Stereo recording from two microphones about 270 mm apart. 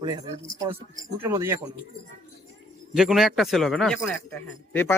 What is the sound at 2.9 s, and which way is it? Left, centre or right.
Speech, centre.